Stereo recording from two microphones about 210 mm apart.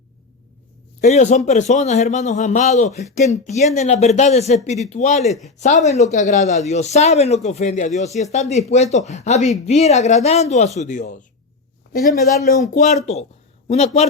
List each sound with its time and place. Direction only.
1.0 s a man's voice: 35° left (ahead or behind)
5.2 s speech: centre (ahead or behind)
5.5 s a man's voice: 35° left (ahead or behind)
12.5 s a man's voice: 35° left (ahead or behind)